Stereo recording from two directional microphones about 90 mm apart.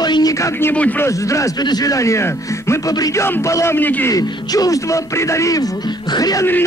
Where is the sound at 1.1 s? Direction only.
35° left (ahead or behind).